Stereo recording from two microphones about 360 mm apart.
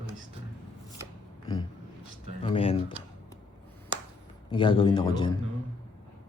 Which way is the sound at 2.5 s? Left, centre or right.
Centre.